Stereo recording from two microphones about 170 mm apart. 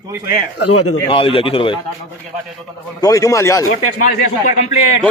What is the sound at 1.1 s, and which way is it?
Speech, 35° left (ahead or behind).